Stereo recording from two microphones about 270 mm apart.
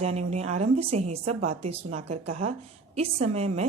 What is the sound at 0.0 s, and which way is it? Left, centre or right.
A woman's voice, right.